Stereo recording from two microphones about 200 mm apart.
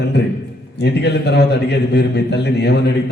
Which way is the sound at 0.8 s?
55° left (ahead or behind).